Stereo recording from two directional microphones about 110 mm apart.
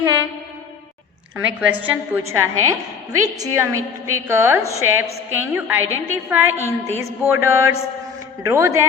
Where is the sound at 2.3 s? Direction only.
25° right (ahead or behind).